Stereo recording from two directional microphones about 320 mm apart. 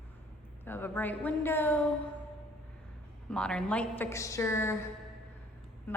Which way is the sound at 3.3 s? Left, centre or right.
Centre.